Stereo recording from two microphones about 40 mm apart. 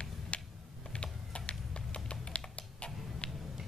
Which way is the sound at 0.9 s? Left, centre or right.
Left.